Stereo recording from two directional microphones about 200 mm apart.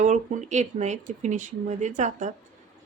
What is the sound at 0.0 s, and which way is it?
Speech, 35° right (ahead or behind).